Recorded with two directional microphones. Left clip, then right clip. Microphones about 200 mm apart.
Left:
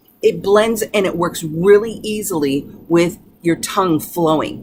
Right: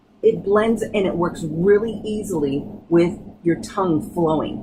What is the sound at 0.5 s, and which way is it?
Speech, 20° left (ahead or behind).